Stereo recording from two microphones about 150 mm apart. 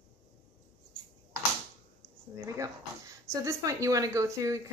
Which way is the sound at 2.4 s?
20° right (ahead or behind).